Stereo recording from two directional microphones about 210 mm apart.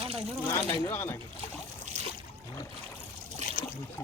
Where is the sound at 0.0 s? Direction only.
30° right (ahead or behind).